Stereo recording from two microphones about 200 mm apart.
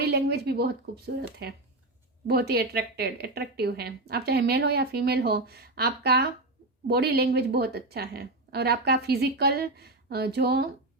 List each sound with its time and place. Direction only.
0.0 s a woman's voice: 55° right (ahead or behind)